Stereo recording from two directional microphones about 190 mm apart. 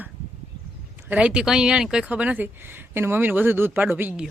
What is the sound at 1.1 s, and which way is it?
Speech, 5° right (ahead or behind).